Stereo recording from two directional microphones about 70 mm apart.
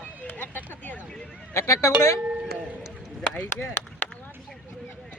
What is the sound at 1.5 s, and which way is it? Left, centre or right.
Speech, left.